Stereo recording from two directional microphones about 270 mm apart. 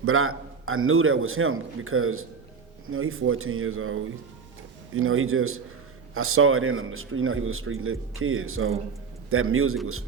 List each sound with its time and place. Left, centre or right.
0.0 s a man's voice: right